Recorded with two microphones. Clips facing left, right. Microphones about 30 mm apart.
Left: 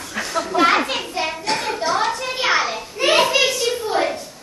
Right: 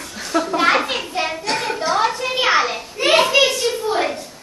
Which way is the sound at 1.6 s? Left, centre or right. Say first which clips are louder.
Right 3 dB; centre.